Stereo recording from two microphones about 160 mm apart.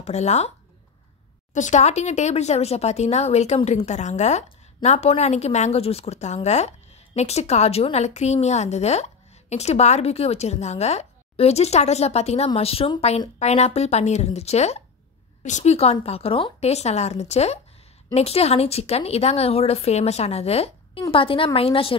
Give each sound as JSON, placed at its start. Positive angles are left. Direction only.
{"t": 0.0, "sound": "a woman's voice", "side_deg": 45}
{"t": 1.5, "sound": "a woman's voice", "side_deg": 50}